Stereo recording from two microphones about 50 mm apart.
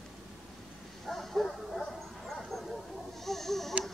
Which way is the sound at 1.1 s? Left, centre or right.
Centre.